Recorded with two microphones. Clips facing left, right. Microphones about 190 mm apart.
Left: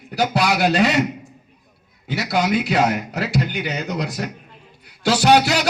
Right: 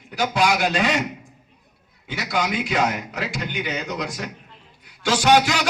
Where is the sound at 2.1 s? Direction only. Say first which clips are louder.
Left 5 dB; 40° left (ahead or behind).